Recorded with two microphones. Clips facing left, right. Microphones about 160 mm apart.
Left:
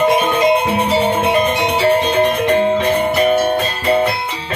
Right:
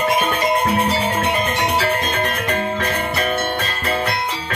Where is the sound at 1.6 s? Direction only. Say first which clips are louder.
Left 5 dB; 25° left (ahead or behind).